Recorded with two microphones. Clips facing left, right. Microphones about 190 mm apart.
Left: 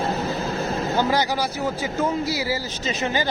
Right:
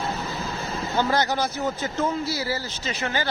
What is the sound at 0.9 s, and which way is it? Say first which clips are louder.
Speech: even; 10° left (ahead or behind).